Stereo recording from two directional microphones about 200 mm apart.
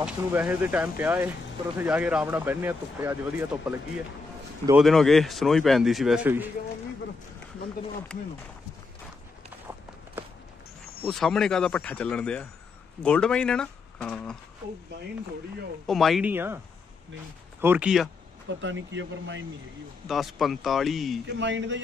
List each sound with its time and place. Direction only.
0.0 s speech: 10° right (ahead or behind)
11.1 s speech: centre (ahead or behind)
15.9 s speech: centre (ahead or behind)
17.6 s speech: 10° right (ahead or behind)
18.5 s speech: 65° right (ahead or behind)
20.1 s speech: centre (ahead or behind)
21.3 s speech: 65° right (ahead or behind)